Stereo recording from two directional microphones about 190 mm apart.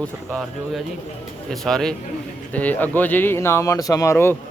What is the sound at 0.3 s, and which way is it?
Speech, 5° right (ahead or behind).